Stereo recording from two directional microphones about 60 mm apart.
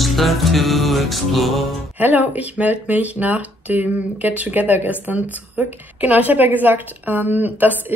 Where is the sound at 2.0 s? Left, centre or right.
Right.